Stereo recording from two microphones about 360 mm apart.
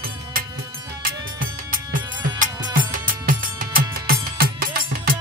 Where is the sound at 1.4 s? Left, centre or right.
Right.